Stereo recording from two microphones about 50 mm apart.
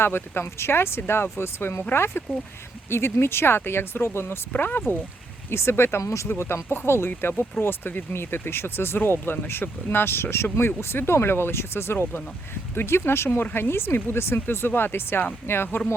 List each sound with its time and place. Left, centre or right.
0.0 s speech: left
5.5 s speech: left
6.0 s speech: left
6.2 s speech: left
7.1 s speech: left